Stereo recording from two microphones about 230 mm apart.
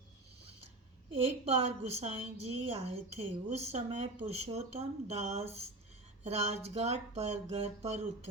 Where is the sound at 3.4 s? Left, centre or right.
Right.